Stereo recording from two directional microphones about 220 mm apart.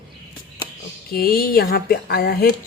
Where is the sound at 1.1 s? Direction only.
45° left (ahead or behind).